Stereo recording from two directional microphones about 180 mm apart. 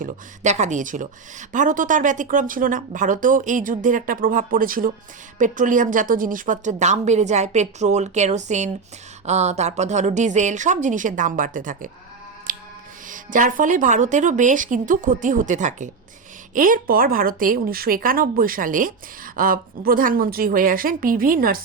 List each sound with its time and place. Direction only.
0.0 s a woman's voice: 40° right (ahead or behind)
12.5 s a sound: 50° right (ahead or behind)
13.1 s a woman's voice: 45° right (ahead or behind)